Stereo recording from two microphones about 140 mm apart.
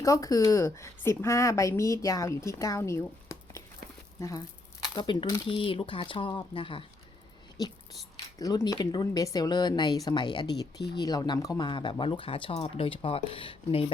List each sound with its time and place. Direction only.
0.0 s a woman's voice: 25° left (ahead or behind)
8.4 s speech: 25° left (ahead or behind)